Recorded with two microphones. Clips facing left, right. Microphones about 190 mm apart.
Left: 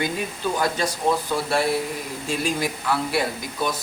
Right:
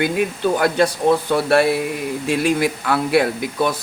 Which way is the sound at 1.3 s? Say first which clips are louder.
Right 6 dB; 65° right (ahead or behind).